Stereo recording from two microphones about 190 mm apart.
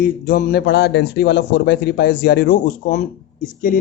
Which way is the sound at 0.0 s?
45° left (ahead or behind).